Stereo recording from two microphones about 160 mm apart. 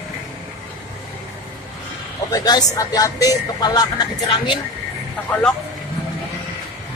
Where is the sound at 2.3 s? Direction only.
25° left (ahead or behind).